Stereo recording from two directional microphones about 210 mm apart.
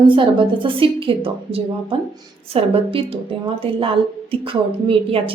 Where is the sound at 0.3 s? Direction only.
25° right (ahead or behind).